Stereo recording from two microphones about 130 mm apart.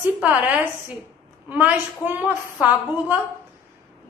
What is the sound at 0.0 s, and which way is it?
A woman's voice, 10° right (ahead or behind).